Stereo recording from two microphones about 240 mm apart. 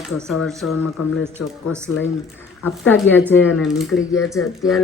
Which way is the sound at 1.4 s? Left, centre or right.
Left.